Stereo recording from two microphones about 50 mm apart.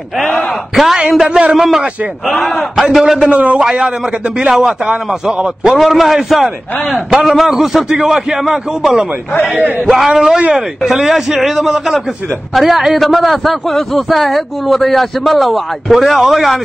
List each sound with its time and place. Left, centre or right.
0.7 s a sound: centre
1.1 s a man's voice: centre
3.2 s a man's voice: right
3.5 s a man's voice: centre
5.8 s a man's voice: centre
7.1 s a man's voice: centre